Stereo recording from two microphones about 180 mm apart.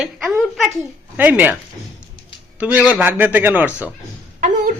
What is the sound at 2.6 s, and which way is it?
Speech, 10° right (ahead or behind).